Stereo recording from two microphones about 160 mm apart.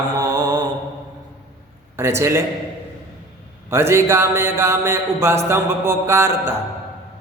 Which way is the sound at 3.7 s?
15° right (ahead or behind).